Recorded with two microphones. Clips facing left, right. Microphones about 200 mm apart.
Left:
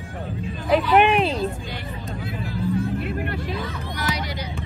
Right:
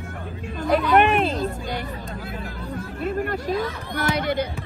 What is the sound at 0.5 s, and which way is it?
Vehicle, 50° right (ahead or behind).